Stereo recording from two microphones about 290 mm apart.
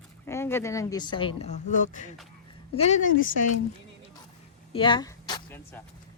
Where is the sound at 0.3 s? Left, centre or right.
Centre; by 3.4 s left.